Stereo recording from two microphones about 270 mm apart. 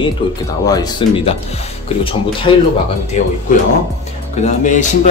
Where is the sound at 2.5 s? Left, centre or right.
Centre.